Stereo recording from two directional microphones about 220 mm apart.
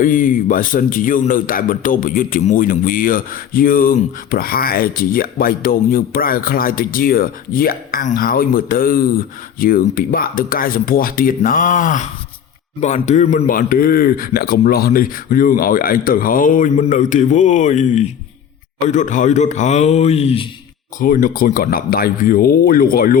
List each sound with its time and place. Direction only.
0.0 s a man's voice: 40° left (ahead or behind)
21.0 s a man's voice: 40° left (ahead or behind)